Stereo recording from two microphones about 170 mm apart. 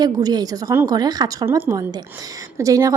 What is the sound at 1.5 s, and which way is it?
A woman's voice, 15° right (ahead or behind).